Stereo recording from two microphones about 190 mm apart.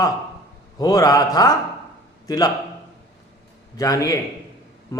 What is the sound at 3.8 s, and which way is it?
A man's voice, 15° left (ahead or behind).